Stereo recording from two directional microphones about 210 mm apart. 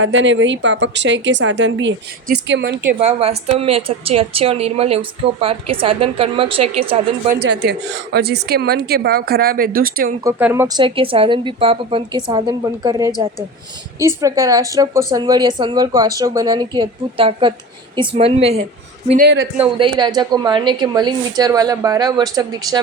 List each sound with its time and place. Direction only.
0.0 s a woman's voice: 60° right (ahead or behind)
3.0 s a woman's voice: 30° right (ahead or behind)
7.6 s a woman's voice: 50° right (ahead or behind)
10.2 s a woman's voice: 10° right (ahead or behind)
14.2 s a woman's voice: 15° right (ahead or behind)
19.0 s a man's voice: 40° right (ahead or behind)
19.5 s a woman's voice: 25° right (ahead or behind)